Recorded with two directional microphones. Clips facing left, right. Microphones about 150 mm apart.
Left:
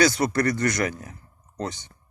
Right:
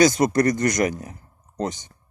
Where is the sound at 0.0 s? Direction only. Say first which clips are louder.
Right 4 dB; 20° right (ahead or behind).